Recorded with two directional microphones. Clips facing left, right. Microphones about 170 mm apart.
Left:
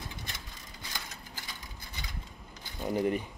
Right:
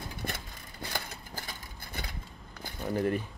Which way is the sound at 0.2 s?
55° right (ahead or behind).